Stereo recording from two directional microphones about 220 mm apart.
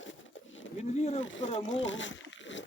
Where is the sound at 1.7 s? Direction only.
60° left (ahead or behind).